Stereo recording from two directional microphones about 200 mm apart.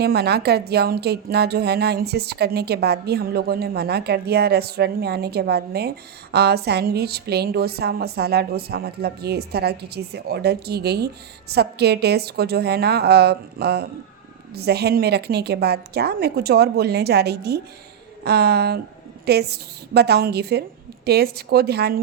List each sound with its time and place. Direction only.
0.0 s speech: 55° right (ahead or behind)